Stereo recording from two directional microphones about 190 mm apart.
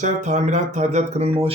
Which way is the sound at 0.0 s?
40° right (ahead or behind).